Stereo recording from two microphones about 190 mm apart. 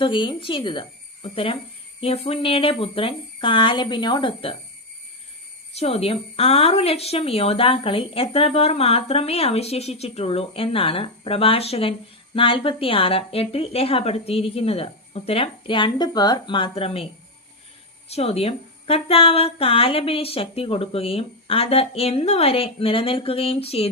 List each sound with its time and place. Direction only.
0.0 s speech: 25° left (ahead or behind)
5.7 s a woman's voice: 35° left (ahead or behind)
18.1 s a woman's voice: 30° left (ahead or behind)